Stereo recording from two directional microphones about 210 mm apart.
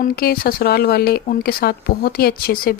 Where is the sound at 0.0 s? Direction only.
45° left (ahead or behind).